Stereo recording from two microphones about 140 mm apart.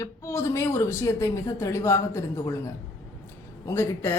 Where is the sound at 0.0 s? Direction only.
20° left (ahead or behind).